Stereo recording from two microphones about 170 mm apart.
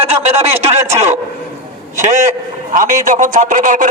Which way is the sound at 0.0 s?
40° right (ahead or behind).